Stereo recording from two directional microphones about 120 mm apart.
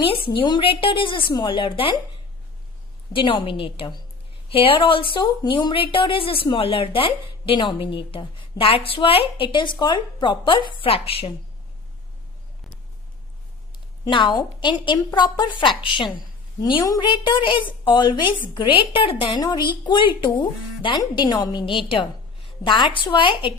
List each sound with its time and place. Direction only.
0.0 s a woman's voice: 45° left (ahead or behind)
3.1 s a woman's voice: 45° left (ahead or behind)
14.0 s a woman's voice: 40° left (ahead or behind)